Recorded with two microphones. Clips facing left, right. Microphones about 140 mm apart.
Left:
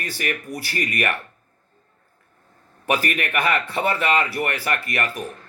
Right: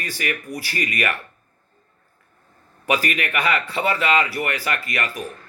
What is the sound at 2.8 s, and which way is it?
A man's voice, 50° left (ahead or behind).